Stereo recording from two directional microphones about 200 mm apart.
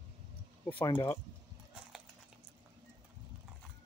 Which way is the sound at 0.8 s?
20° left (ahead or behind).